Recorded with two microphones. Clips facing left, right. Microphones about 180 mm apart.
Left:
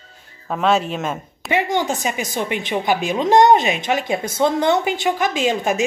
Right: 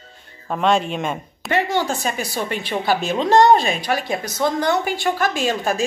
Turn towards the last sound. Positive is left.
turn(degrees=15)  # may be behind; listen again after turning